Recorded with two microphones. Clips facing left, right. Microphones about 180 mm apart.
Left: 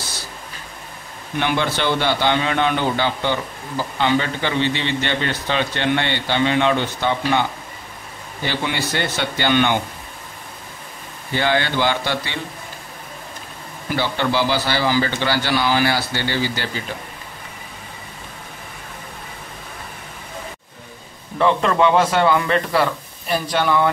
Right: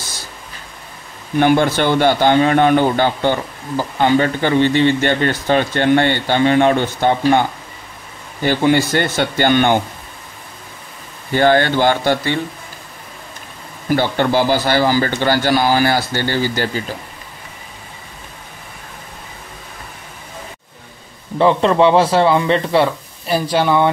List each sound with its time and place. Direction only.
1.4 s a man's voice: 45° right (ahead or behind)
11.3 s a man's voice: 45° right (ahead or behind)
13.9 s a man's voice: 50° right (ahead or behind)
21.4 s speech: 30° right (ahead or behind)